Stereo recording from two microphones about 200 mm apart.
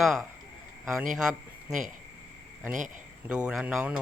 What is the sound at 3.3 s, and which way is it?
Speech, 5° right (ahead or behind).